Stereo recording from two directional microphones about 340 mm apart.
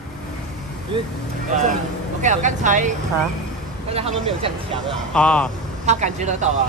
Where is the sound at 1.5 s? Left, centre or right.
Right.